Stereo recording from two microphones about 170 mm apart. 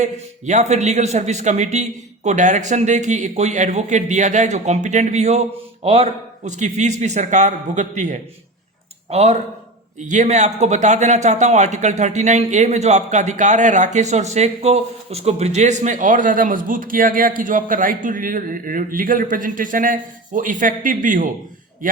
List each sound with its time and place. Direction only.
0.0 s a man's voice: 45° right (ahead or behind)